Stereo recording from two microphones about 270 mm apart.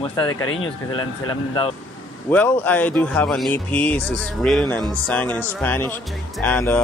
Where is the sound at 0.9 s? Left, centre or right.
Centre.